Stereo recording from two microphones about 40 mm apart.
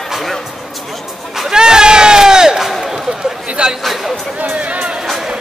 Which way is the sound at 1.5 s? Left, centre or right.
Centre.